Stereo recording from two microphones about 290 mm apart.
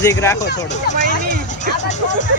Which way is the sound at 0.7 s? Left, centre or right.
Left.